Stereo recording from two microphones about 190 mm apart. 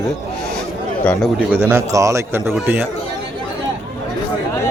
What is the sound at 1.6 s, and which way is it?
A man's voice, 15° right (ahead or behind).